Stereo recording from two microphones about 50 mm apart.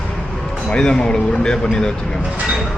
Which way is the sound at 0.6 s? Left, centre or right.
Centre.